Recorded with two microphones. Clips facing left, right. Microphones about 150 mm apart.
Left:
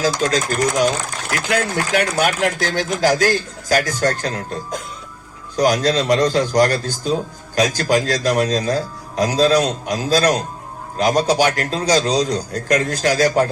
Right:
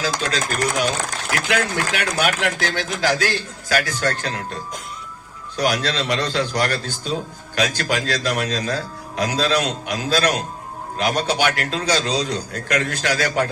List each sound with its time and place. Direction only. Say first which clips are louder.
0.0 s speech: left 5 dB; 45° left (ahead or behind)
5.5 s speech: left 5 dB; 40° left (ahead or behind)